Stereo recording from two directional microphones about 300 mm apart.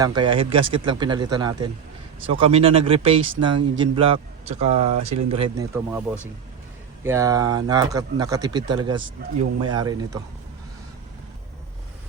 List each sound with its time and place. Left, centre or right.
0.0 s a man's voice: centre
5.7 s speech: centre